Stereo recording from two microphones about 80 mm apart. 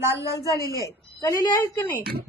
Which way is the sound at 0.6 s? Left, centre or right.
Right.